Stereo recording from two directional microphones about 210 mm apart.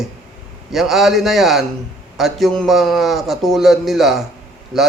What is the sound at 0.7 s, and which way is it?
A man's voice, centre (ahead or behind).